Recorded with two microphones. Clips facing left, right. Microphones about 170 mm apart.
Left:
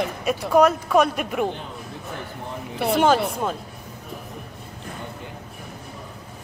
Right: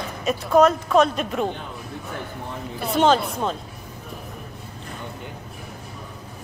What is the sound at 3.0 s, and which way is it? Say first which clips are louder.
Speech: right 1 dB; 10° left (ahead or behind).